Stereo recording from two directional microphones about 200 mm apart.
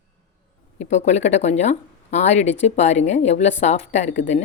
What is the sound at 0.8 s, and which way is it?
Speech, 35° left (ahead or behind).